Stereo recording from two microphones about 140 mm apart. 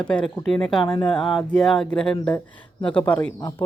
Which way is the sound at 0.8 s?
30° left (ahead or behind).